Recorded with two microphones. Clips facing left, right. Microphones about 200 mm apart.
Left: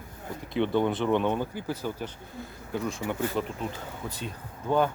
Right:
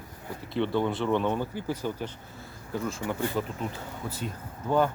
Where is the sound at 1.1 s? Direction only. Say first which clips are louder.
Left 1 dB; 15° left (ahead or behind).